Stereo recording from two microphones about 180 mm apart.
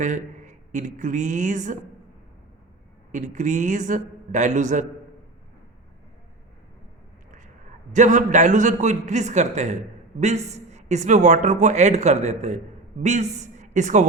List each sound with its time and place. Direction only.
0.0 s speech: 45° right (ahead or behind)
3.1 s speech: 45° right (ahead or behind)
7.3 s vehicle: 45° right (ahead or behind)
7.9 s a man's voice: 45° right (ahead or behind)